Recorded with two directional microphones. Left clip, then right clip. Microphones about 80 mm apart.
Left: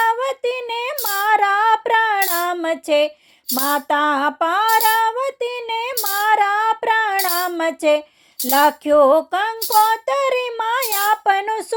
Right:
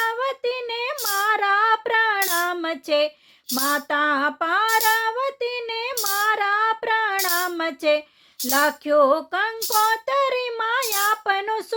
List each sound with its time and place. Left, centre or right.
0.0 s female singing: left
7.6 s child singing: left
8.4 s speech: left
9.8 s child singing: left
10.6 s speech: left